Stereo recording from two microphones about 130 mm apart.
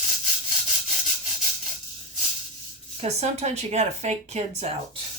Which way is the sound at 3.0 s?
55° right (ahead or behind).